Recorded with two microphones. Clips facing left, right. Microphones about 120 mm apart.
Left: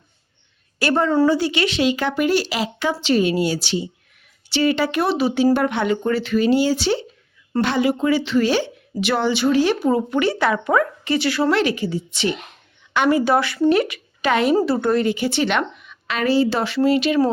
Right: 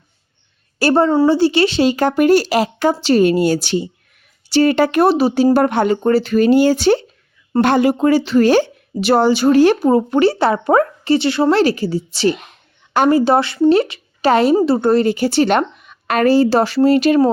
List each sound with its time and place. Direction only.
0.8 s a woman's voice: 35° right (ahead or behind)